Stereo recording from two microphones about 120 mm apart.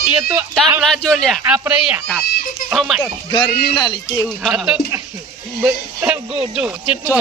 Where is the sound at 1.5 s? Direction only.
10° right (ahead or behind).